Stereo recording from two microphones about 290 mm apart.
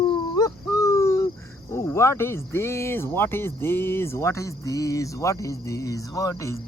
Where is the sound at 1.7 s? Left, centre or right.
Centre.